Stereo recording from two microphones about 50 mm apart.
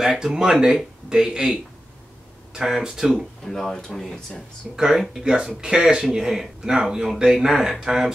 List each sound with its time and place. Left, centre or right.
0.0 s speech: centre
3.4 s speech: centre
4.7 s speech: centre